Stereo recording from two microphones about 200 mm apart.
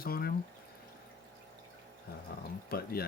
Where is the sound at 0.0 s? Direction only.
50° left (ahead or behind).